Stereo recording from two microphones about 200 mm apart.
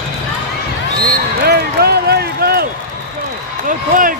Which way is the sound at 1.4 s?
55° right (ahead or behind).